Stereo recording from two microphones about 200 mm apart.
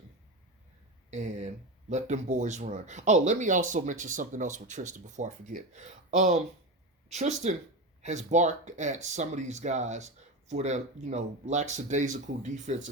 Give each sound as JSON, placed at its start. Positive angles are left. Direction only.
{"t": 1.1, "sound": "speech", "side_deg": -35}